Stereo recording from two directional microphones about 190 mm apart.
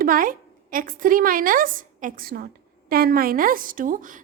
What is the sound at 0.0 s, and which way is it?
A woman's voice, 45° right (ahead or behind).